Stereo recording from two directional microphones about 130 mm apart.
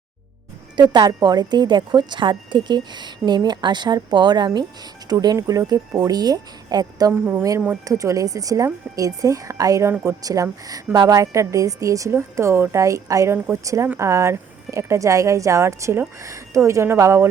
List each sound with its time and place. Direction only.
0.8 s speech: 35° right (ahead or behind)
7.1 s speech: 15° right (ahead or behind)